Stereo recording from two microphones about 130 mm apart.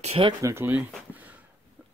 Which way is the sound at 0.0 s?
50° right (ahead or behind).